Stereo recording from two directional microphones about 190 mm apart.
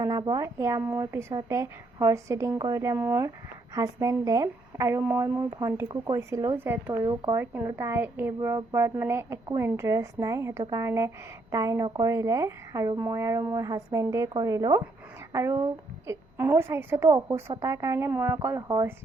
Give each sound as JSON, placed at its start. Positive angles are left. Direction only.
{"t": 0.0, "sound": "a woman's voice", "side_deg": -20}